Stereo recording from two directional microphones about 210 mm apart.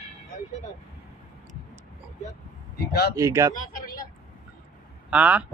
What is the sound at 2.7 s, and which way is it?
Speech, 50° left (ahead or behind).